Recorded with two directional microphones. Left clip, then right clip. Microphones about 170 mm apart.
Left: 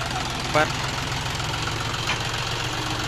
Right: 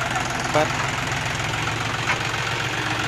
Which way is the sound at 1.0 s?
20° right (ahead or behind).